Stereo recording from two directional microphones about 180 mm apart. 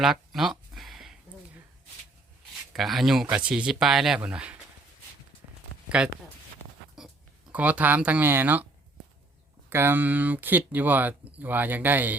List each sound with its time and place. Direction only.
0.0 s a sound: centre (ahead or behind)
2.7 s speech: centre (ahead or behind)
6.0 s speech: 5° right (ahead or behind)
7.0 s a sound: centre (ahead or behind)
7.5 s speech: 10° right (ahead or behind)
9.6 s speech: 10° right (ahead or behind)